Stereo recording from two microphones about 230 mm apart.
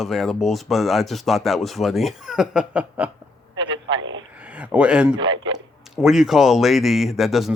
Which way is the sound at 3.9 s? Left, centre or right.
Right.